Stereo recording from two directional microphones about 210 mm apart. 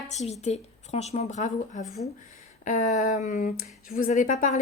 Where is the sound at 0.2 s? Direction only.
35° left (ahead or behind).